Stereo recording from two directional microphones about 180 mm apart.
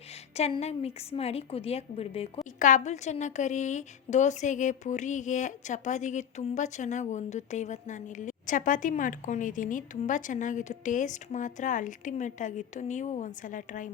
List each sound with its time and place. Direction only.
0.3 s a woman's voice: 35° left (ahead or behind)